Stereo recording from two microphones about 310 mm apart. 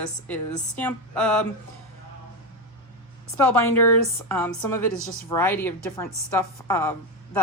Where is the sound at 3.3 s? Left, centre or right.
Centre.